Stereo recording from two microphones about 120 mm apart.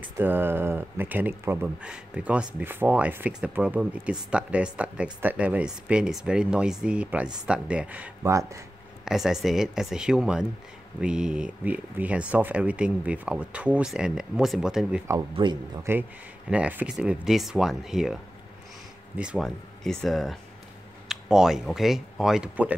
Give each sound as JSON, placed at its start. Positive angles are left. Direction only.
{"t": 0.2, "sound": "speech", "side_deg": -15}
{"t": 8.2, "sound": "speech", "side_deg": -25}
{"t": 9.0, "sound": "speech", "side_deg": -5}
{"t": 15.4, "sound": "speech", "side_deg": -45}
{"t": 15.8, "sound": "speech", "side_deg": -20}
{"t": 19.4, "sound": "speech", "side_deg": 5}